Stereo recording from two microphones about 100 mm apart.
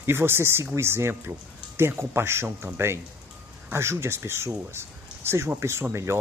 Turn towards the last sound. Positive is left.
turn(degrees=-25)  # may be behind; listen again after turning